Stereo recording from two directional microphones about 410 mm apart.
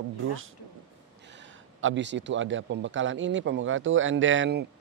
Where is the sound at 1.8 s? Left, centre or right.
Right.